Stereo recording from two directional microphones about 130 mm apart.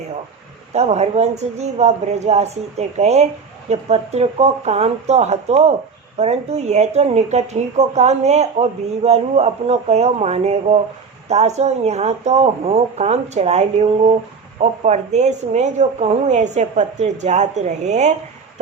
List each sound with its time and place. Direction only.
0.7 s speech: 55° right (ahead or behind)